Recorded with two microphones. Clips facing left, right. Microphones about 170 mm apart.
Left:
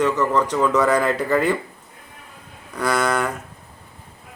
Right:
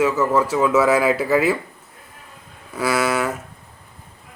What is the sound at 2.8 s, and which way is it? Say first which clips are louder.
Speech: right 1 dB; 5° right (ahead or behind).